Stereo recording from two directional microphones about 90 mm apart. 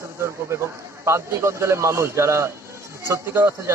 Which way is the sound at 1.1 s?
30° right (ahead or behind).